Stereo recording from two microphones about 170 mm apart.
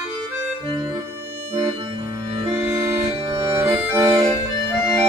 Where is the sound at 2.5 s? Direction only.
15° right (ahead or behind).